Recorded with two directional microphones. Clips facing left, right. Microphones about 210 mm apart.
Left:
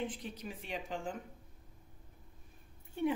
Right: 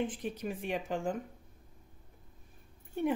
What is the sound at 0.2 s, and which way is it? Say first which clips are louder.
Speech: right 8 dB; 50° right (ahead or behind).